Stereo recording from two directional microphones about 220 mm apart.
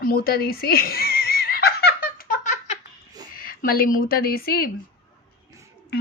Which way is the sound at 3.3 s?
40° left (ahead or behind).